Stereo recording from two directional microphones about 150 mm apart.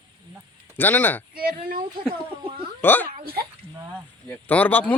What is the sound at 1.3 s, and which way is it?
Speech, 80° right.